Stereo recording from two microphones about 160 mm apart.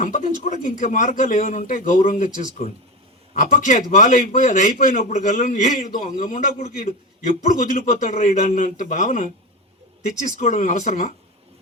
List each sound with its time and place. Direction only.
0.0 s a man's voice: 55° left (ahead or behind)